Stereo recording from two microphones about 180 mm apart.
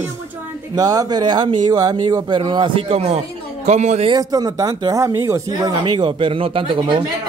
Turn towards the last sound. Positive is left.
turn(degrees=-25)  # may be behind; listen again after turning